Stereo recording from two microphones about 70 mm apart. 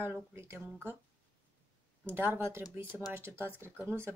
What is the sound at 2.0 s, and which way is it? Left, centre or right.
Speech, right.